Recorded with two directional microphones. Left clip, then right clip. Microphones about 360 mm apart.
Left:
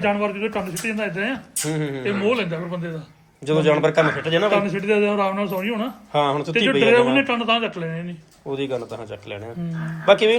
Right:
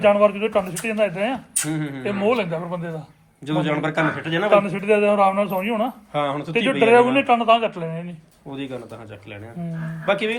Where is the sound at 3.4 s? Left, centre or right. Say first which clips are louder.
Left 5 dB; centre.